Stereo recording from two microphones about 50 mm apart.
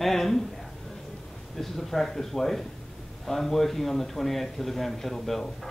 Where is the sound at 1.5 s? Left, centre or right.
Centre.